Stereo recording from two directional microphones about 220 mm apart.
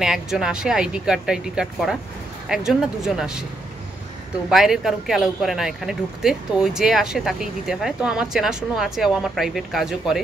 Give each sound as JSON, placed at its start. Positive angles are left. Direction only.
{"t": 0.0, "sound": "speech", "side_deg": 0}
{"t": 4.5, "sound": "speech", "side_deg": 0}